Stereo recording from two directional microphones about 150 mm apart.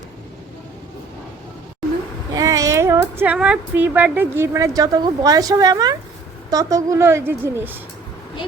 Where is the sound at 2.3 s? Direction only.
25° right (ahead or behind).